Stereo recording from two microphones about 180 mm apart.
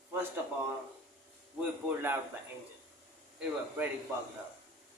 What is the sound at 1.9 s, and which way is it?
Speech, 10° right (ahead or behind).